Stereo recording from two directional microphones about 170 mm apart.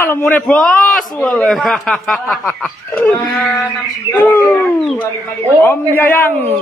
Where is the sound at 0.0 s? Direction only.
15° left (ahead or behind).